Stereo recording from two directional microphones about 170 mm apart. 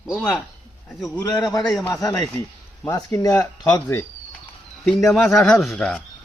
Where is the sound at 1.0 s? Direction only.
20° left (ahead or behind).